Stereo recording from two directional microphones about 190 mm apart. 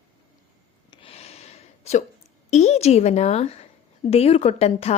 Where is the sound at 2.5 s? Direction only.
35° left (ahead or behind).